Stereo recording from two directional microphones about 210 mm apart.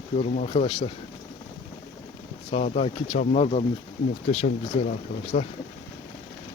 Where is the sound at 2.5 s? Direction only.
30° left (ahead or behind).